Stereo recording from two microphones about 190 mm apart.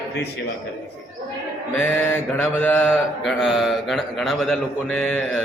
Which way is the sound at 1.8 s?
5° left (ahead or behind).